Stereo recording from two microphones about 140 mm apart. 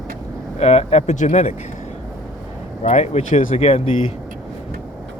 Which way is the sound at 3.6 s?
40° left (ahead or behind).